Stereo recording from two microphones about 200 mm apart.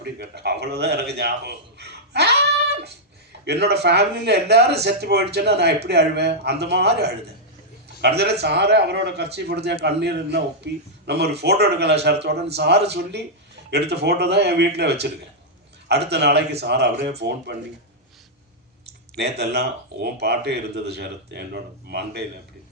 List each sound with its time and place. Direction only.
0.0 s a man's voice: 55° right (ahead or behind)
15.9 s speech: 55° right (ahead or behind)
19.1 s speech: 55° right (ahead or behind)